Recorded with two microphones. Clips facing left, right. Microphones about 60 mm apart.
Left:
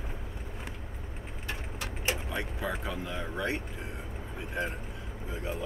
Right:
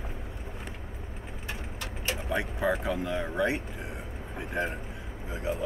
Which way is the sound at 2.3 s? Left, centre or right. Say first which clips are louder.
Right 6 dB; centre.